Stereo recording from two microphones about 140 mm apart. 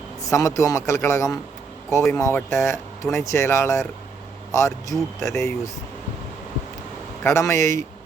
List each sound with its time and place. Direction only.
0.3 s speech: 20° left (ahead or behind)
7.3 s speech: 20° left (ahead or behind)